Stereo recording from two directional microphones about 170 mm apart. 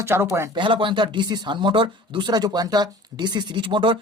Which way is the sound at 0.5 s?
30° right (ahead or behind).